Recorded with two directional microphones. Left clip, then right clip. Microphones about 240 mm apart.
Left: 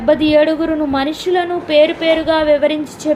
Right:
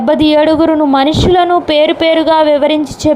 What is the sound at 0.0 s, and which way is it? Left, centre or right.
A woman's voice, right.